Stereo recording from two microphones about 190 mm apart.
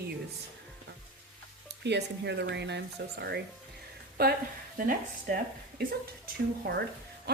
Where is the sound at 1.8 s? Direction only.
65° right (ahead or behind).